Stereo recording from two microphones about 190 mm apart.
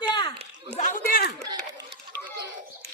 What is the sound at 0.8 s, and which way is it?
Chatter, 45° left (ahead or behind).